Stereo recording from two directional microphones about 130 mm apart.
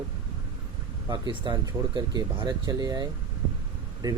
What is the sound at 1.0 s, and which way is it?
Speech, 35° right (ahead or behind).